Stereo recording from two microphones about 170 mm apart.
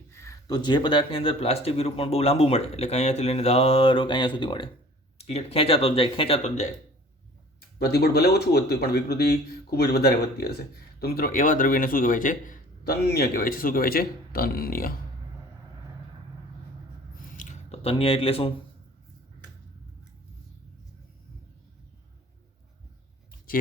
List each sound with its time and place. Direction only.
0.1 s speech: 15° left (ahead or behind)
5.1 s speech: 40° left (ahead or behind)
7.9 s a man's voice: 70° left (ahead or behind)
17.3 s squish: 45° left (ahead or behind)